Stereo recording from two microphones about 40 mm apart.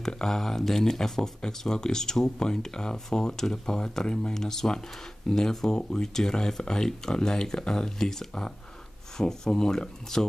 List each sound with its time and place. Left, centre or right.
0.0 s speech: centre